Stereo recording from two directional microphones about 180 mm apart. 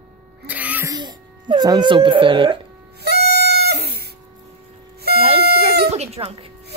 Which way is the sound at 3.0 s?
65° right (ahead or behind).